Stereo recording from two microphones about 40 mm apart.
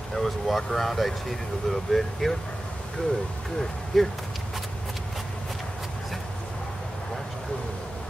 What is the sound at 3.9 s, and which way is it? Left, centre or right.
Speech, centre.